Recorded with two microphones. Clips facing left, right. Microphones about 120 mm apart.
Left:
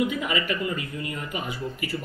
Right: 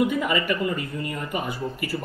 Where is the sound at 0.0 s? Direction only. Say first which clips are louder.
Right 3 dB; 50° right (ahead or behind).